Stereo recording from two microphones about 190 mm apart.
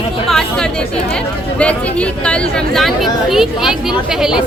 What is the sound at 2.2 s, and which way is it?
Speech, 5° left (ahead or behind).